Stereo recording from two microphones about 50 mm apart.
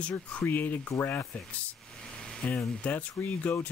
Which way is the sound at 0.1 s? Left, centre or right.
Left.